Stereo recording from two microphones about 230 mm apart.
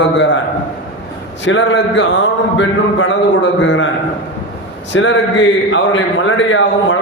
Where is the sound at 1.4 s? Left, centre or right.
Left.